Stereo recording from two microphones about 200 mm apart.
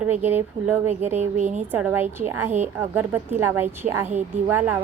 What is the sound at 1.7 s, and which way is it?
A woman's voice, 10° right (ahead or behind).